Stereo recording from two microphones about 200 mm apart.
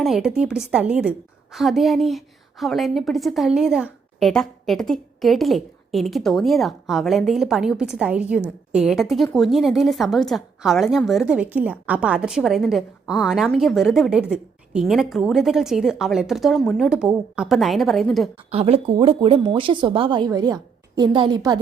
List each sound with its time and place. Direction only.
0.0 s a woman's voice: centre (ahead or behind)
18.5 s speech: 30° right (ahead or behind)